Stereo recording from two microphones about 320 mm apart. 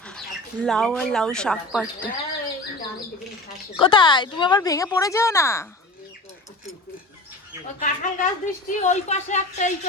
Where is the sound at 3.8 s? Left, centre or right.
Centre.